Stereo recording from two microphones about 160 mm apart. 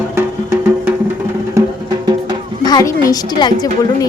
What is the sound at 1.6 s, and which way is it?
Music, 20° right (ahead or behind).